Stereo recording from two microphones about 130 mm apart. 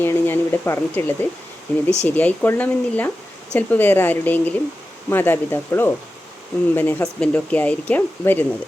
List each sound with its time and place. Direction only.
0.0 s speech: 15° left (ahead or behind)